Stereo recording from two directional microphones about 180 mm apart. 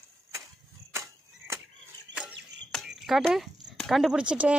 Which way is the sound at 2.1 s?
80° right.